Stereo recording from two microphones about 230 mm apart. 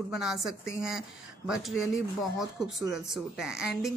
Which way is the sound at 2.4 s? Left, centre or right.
Centre.